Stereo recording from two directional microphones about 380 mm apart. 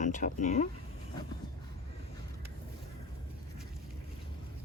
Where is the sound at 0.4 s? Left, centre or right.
Centre.